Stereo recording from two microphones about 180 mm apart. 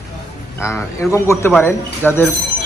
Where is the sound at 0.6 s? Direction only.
15° left (ahead or behind).